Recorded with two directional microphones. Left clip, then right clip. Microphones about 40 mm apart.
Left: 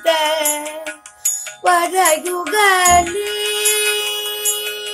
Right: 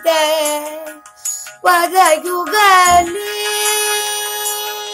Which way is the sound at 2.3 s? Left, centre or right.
Left.